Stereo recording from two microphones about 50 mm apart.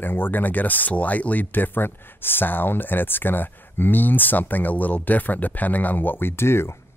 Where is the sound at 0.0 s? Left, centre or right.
Left.